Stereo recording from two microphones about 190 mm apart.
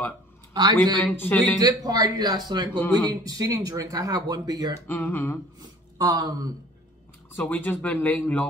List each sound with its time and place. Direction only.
0.5 s a man's voice: 25° right (ahead or behind)
1.0 s speech: 10° left (ahead or behind)
1.6 s speech: 20° right (ahead or behind)
4.8 s speech: 10° left (ahead or behind)
5.9 s speech: 20° right (ahead or behind)
7.3 s speech: 10° left (ahead or behind)